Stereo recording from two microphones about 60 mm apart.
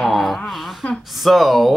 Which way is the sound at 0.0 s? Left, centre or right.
Centre.